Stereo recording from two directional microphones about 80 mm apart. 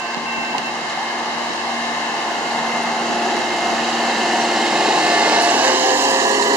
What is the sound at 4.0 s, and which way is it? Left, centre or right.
Hair dryer, centre.